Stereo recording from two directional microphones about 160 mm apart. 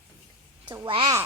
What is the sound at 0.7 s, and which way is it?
Speech, 30° right (ahead or behind).